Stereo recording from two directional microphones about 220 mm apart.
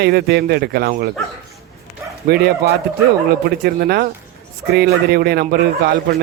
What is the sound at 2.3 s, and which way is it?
Speech, 45° right (ahead or behind).